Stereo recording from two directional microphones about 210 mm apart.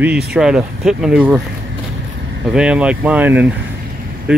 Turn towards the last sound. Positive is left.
turn(degrees=-5)  # may be behind; listen again after turning